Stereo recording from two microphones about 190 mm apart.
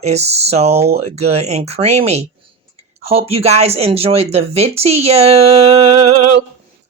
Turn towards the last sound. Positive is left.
turn(degrees=-30)  # may be behind; listen again after turning